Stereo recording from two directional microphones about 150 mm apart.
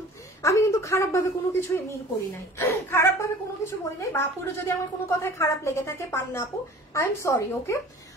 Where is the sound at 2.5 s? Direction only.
15° left (ahead or behind).